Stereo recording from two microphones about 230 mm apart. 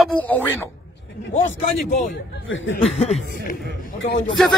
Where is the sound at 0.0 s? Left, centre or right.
Centre.